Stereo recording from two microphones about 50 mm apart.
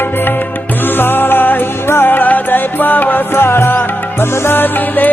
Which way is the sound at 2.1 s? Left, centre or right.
Left.